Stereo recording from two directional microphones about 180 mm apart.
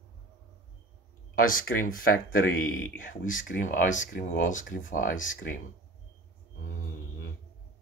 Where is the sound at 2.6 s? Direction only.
90° left.